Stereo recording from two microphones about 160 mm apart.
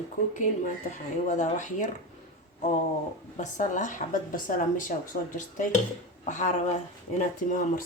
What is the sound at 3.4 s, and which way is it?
Speech, 50° left (ahead or behind).